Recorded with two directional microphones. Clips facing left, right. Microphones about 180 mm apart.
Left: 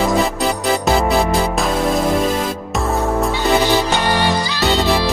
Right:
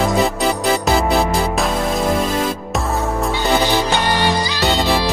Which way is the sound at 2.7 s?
Centre (ahead or behind).